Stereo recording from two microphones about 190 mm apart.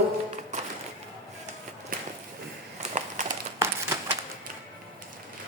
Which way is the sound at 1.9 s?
45° right (ahead or behind).